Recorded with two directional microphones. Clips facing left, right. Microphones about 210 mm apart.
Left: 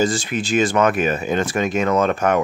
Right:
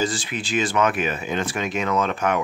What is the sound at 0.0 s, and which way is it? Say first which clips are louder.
Speech: left 6 dB; 45° left (ahead or behind).